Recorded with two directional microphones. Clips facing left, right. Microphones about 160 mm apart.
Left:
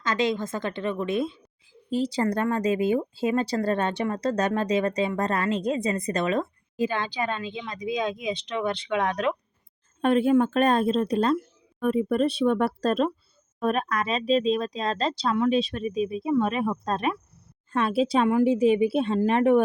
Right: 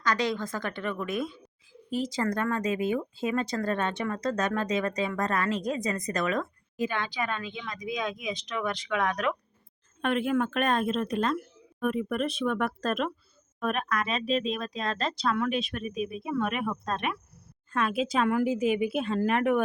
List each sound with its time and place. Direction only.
0.0 s speech: 20° left (ahead or behind)